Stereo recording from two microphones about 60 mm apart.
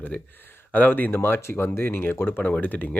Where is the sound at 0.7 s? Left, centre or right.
Left.